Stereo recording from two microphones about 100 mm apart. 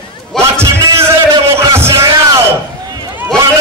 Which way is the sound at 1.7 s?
30° right (ahead or behind).